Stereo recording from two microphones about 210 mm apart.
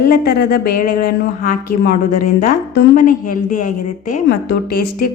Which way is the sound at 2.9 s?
40° left (ahead or behind).